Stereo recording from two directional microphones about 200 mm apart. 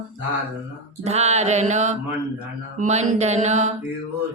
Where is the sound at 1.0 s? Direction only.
35° right (ahead or behind).